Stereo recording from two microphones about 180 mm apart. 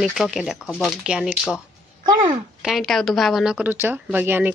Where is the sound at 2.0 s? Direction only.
25° right (ahead or behind).